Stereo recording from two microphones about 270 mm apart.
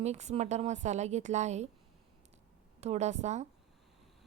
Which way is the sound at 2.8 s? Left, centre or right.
Right.